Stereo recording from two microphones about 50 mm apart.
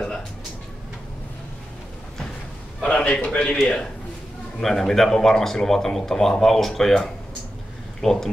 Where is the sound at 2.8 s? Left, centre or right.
Centre.